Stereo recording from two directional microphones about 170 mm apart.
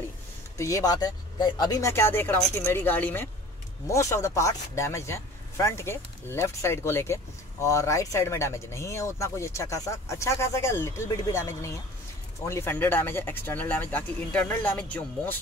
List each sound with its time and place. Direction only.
0.6 s speech: 20° left (ahead or behind)